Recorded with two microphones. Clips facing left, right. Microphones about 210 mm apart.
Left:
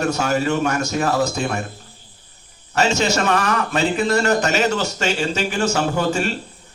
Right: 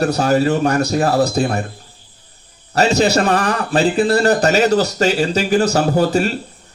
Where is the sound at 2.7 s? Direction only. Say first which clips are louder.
Right 5 dB; 35° right (ahead or behind).